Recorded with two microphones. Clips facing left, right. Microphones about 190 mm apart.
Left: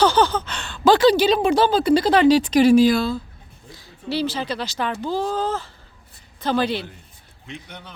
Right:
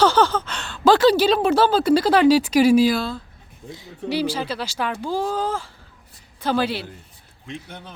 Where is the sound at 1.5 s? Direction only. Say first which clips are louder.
Even; 5° right (ahead or behind).